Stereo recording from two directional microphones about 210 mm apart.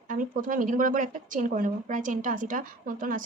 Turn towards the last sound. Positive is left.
turn(degrees=-40)  # may be behind; listen again after turning